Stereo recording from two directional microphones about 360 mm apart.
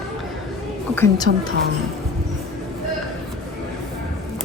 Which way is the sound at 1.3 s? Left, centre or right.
Right.